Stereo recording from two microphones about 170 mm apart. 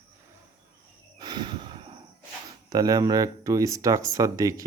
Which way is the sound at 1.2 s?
25° right (ahead or behind).